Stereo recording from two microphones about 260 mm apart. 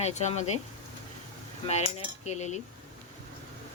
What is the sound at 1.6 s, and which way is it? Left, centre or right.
Speech, left.